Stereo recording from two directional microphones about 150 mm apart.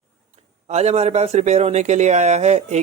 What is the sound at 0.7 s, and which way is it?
A man's voice, 45° right (ahead or behind).